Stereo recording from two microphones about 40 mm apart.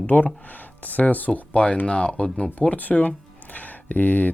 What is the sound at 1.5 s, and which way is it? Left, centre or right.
Speech, left.